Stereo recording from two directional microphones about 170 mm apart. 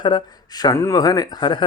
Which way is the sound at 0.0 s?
25° left (ahead or behind).